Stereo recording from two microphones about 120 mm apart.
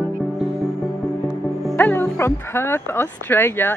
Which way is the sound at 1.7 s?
15° left (ahead or behind).